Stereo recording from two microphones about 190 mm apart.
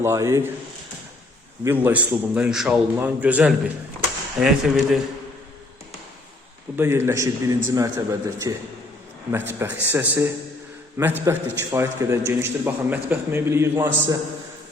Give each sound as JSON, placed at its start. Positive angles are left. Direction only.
{"t": 0.0, "sound": "a man's voice", "side_deg": -15}
{"t": 1.6, "sound": "a man's voice", "side_deg": -10}
{"t": 6.7, "sound": "a man's voice", "side_deg": -15}